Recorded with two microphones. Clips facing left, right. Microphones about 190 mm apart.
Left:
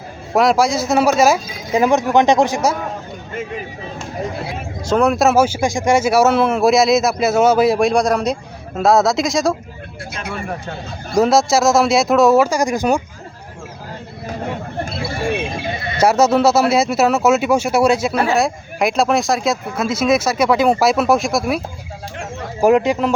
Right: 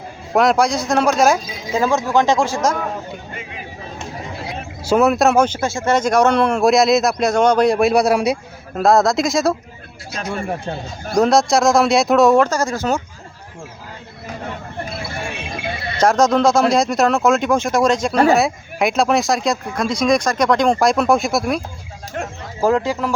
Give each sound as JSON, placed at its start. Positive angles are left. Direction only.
{"t": 0.3, "sound": "speech", "side_deg": 0}
{"t": 1.7, "sound": "speech", "side_deg": 15}
{"t": 4.9, "sound": "speech", "side_deg": -5}
{"t": 11.1, "sound": "speech", "side_deg": 0}
{"t": 16.0, "sound": "speech", "side_deg": 10}
{"t": 22.6, "sound": "speech", "side_deg": 20}